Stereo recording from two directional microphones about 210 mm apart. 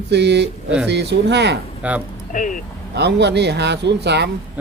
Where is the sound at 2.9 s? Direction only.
55° right (ahead or behind).